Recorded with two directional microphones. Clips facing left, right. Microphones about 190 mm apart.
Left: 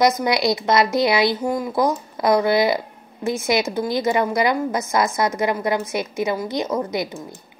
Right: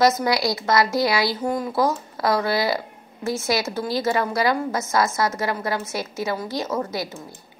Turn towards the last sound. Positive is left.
turn(degrees=15)  # may be behind; listen again after turning